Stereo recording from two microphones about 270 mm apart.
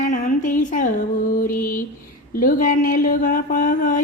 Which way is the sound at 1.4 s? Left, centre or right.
Left.